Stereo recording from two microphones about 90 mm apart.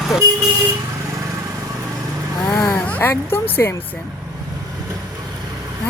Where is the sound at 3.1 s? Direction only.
25° left (ahead or behind).